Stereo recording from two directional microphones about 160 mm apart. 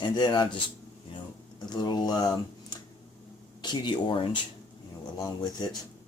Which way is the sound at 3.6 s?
30° left (ahead or behind).